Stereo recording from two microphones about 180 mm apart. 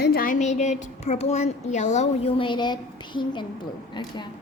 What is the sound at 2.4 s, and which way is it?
A woman's voice, 25° left (ahead or behind).